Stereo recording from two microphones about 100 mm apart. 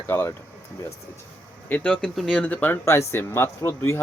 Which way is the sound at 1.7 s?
15° left (ahead or behind).